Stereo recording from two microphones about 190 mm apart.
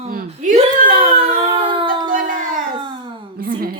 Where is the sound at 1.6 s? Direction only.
25° right (ahead or behind).